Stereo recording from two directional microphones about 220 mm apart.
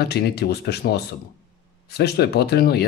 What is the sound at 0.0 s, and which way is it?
Speech, 45° left (ahead or behind).